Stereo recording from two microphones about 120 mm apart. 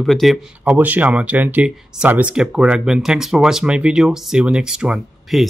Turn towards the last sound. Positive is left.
turn(degrees=-5)  # may be behind; listen again after turning